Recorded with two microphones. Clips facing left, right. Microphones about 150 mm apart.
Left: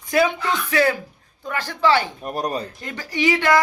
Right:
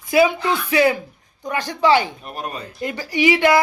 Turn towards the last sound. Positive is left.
turn(degrees=-10)  # may be behind; listen again after turning